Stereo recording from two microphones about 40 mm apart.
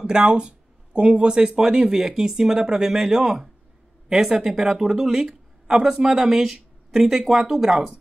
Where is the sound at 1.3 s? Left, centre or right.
Centre.